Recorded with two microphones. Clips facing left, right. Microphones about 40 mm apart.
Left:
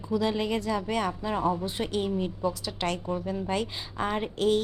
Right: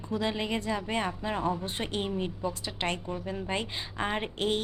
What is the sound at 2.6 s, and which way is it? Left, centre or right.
Speech, right.